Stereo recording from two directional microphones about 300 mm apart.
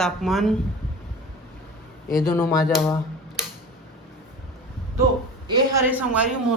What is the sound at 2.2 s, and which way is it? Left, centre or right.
Speech, centre.